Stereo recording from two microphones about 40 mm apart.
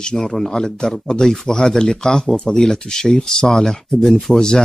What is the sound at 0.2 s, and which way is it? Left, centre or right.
Speech, centre.